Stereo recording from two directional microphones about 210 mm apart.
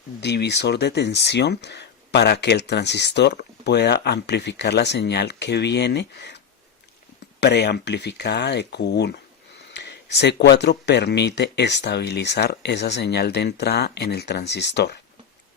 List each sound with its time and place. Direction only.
0.2 s speech: 55° left (ahead or behind)